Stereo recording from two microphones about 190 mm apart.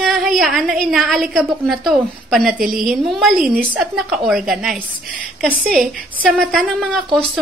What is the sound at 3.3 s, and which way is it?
Speech, 50° right (ahead or behind).